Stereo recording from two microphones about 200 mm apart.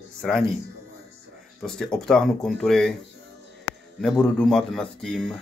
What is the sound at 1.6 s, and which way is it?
Speech, 5° left (ahead or behind).